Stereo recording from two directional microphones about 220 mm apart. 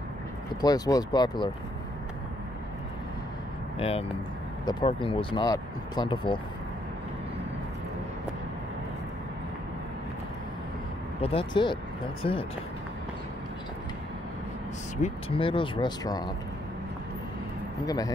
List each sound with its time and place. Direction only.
0.6 s speech: 15° left (ahead or behind)
3.7 s speech: 25° left (ahead or behind)
11.1 s speech: 25° left (ahead or behind)
15.0 s speech: 30° left (ahead or behind)
17.8 s speech: 15° left (ahead or behind)